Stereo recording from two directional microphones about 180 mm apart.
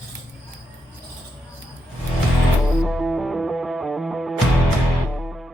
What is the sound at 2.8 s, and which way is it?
Music, centre (ahead or behind).